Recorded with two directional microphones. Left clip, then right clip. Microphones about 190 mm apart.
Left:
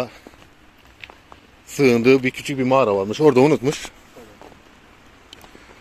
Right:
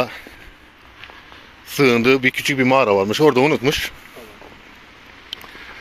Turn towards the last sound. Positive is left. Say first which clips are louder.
# right 10 dB
turn(degrees=5)  # may be behind; listen again after turning